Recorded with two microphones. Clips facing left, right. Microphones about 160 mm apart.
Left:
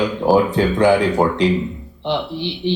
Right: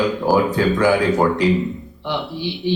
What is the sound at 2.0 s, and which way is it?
Speech, 25° left (ahead or behind).